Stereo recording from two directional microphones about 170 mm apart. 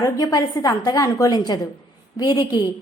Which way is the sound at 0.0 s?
20° left (ahead or behind).